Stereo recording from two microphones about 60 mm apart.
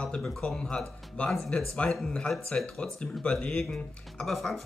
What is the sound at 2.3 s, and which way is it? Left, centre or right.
Speech, centre.